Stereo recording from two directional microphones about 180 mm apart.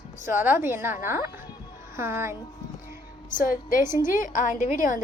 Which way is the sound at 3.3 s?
50° left (ahead or behind).